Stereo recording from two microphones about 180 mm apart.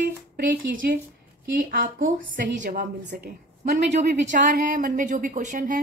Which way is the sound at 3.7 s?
40° right (ahead or behind).